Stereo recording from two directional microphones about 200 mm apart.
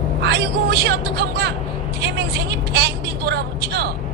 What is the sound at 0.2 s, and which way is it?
Speech, 55° right (ahead or behind).